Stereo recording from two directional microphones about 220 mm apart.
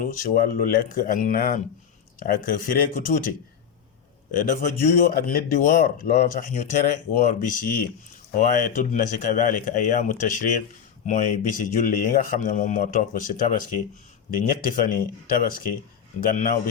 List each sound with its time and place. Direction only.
0.0 s speech: 40° left (ahead or behind)
4.3 s speech: 35° left (ahead or behind)